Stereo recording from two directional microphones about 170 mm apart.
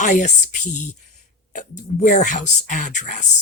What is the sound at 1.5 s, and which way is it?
Speech, 50° left (ahead or behind).